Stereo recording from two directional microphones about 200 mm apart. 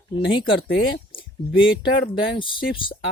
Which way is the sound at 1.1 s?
25° left (ahead or behind).